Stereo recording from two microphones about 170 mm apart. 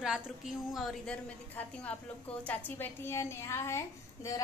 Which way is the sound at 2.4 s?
10° left (ahead or behind).